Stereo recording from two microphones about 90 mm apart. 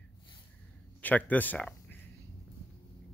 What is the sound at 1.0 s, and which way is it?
Speech, 20° left (ahead or behind).